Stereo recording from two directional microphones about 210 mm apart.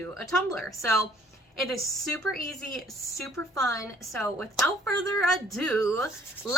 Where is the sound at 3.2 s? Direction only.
15° left (ahead or behind).